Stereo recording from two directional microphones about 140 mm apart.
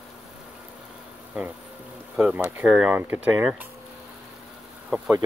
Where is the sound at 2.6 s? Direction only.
5° right (ahead or behind).